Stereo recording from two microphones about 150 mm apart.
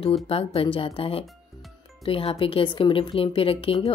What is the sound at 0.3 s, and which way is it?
A woman's voice, 40° left (ahead or behind).